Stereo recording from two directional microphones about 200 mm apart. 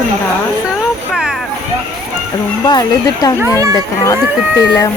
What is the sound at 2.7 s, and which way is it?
Speech, 20° left (ahead or behind).